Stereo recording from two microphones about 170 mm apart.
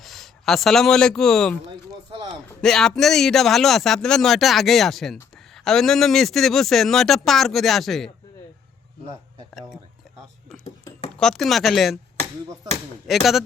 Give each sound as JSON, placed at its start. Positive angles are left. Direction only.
{"t": 0.0, "sound": "speech", "side_deg": 0}
{"t": 2.1, "sound": "a sound", "side_deg": -30}
{"t": 2.5, "sound": "a man's voice", "side_deg": 5}
{"t": 9.6, "sound": "a man's voice", "side_deg": -5}
{"t": 11.2, "sound": "a man's voice", "side_deg": 0}
{"t": 13.1, "sound": "a man's voice", "side_deg": 0}